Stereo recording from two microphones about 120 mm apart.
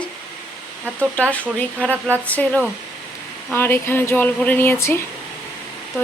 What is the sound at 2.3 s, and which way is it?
Speech, 10° left (ahead or behind).